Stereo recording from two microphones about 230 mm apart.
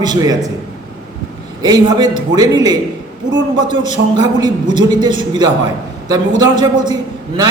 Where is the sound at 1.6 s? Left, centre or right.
Centre.